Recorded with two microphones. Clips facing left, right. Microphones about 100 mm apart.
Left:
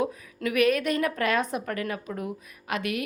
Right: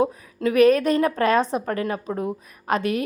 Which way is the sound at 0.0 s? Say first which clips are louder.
Right 6 dB; 30° right (ahead or behind).